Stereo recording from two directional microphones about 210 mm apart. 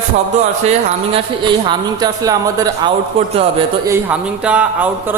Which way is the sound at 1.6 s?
15° right (ahead or behind).